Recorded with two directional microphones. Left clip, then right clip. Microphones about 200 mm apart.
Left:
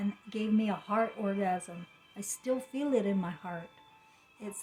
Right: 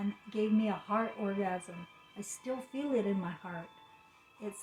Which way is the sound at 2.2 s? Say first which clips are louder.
Left 6 dB; 55° left (ahead or behind).